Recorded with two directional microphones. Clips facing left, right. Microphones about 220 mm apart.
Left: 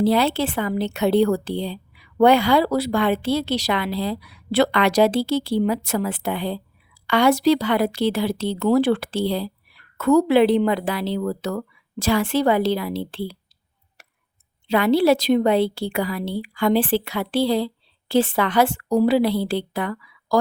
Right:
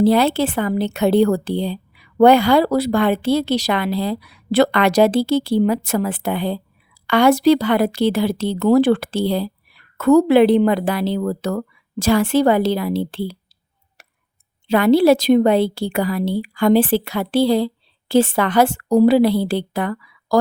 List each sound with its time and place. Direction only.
0.0 s a woman's voice: 45° right (ahead or behind)
14.7 s a woman's voice: 45° right (ahead or behind)